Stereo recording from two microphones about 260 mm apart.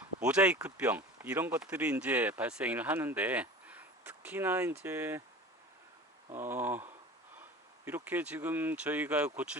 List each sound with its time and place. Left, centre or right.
0.0 s speech: centre
6.3 s speech: centre